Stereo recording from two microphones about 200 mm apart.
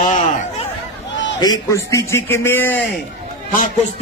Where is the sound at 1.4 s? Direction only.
15° left (ahead or behind).